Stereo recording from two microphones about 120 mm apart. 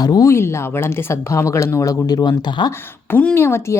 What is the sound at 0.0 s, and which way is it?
Speech, 30° left (ahead or behind).